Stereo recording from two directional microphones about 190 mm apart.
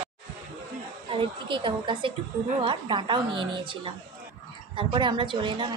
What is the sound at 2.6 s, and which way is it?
A woman's voice, 25° right (ahead or behind).